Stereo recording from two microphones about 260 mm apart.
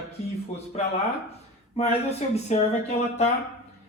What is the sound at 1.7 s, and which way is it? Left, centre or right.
Speech, left.